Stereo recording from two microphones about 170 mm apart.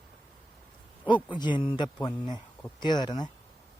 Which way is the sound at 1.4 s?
30° left (ahead or behind).